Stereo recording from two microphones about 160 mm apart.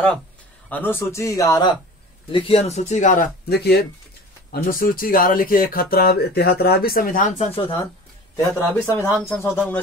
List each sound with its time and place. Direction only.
0.7 s a man's voice: 10° left (ahead or behind)
2.3 s speech: 35° left (ahead or behind)
3.4 s speech: 85° left
4.5 s speech: 60° left (ahead or behind)
7.3 s speech: 40° left (ahead or behind)
8.4 s a man's voice: 15° left (ahead or behind)